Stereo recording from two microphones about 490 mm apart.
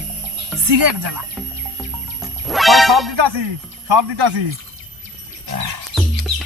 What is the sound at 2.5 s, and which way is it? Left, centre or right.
Speech, centre.